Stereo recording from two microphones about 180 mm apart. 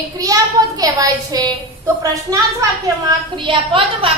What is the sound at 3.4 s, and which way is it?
Speech, 30° right (ahead or behind).